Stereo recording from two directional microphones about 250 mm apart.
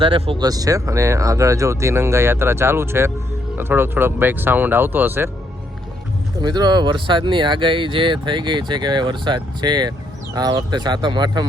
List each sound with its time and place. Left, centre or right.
0.0 s speech: right
6.4 s speech: centre